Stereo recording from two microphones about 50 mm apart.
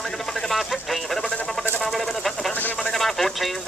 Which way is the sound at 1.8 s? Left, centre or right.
Centre.